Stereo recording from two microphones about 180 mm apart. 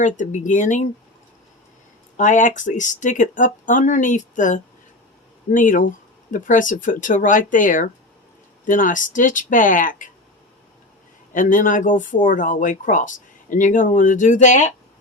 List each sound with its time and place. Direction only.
0.0 s speech: 45° left (ahead or behind)
2.1 s speech: 45° left (ahead or behind)
11.3 s speech: 50° left (ahead or behind)